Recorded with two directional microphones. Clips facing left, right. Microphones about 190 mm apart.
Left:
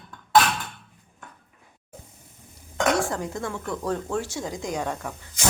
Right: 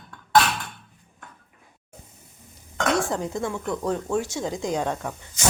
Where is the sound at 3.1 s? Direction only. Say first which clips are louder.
Right 3 dB; 20° right (ahead or behind).